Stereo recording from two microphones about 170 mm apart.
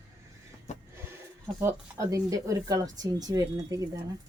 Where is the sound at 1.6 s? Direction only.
20° right (ahead or behind).